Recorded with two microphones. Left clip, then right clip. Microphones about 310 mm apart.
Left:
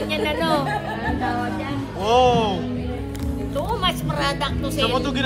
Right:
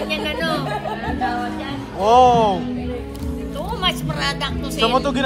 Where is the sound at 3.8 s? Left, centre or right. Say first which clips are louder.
Right 4 dB; centre.